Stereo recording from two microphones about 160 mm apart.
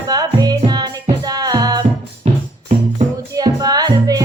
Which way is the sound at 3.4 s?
25° right (ahead or behind).